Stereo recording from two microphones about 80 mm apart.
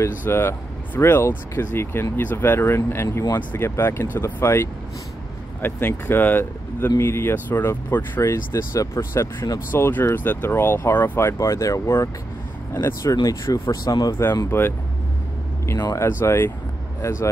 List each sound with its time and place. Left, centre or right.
0.0 s speech: left
9.7 s speech: left
11.3 s speech: left
13.0 s speech: left
13.3 s speech: left
13.8 s speech: left
14.5 s speech: left
15.9 s speech: left